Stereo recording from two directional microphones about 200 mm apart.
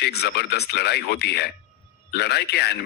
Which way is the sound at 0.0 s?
55° left (ahead or behind).